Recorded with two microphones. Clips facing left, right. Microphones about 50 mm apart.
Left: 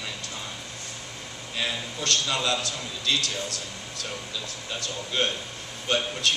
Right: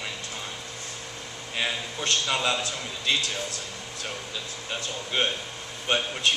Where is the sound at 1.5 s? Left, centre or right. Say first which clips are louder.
Right 1 dB; right.